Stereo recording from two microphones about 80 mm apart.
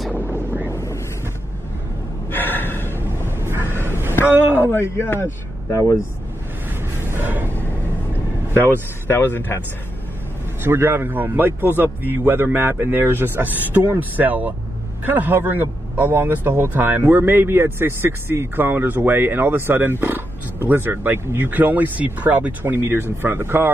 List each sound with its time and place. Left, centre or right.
0.4 s wind noise: right
0.7 s wind noise: left
2.3 s gasp: left
3.0 s a sound: right
4.6 s speech: left
5.7 s speech: left
7.1 s a sound: right
9.0 s speech: left
10.6 s speech: right